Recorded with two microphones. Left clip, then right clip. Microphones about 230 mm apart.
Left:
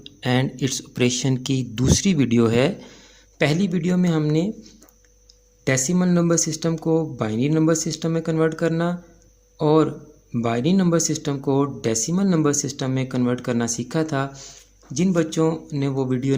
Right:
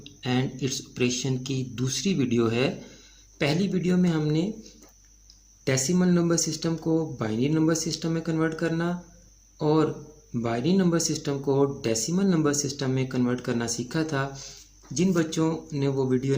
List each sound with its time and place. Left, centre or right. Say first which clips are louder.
0.0 s speech: left 6 dB; left
5.6 s speech: left 3 dB; left